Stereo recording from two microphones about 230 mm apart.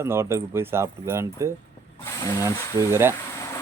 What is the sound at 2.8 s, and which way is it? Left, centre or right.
Speech, centre.